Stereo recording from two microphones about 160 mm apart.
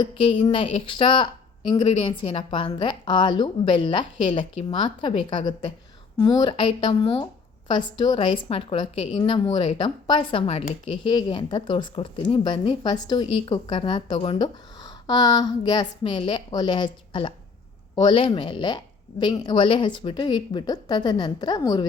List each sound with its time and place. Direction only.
0.0 s a woman's voice: 30° left (ahead or behind)